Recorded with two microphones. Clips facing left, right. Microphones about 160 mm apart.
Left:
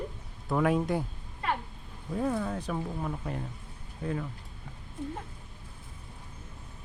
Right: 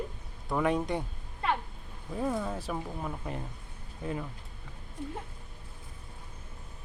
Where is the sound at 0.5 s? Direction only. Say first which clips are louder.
Left 2 dB; centre (ahead or behind).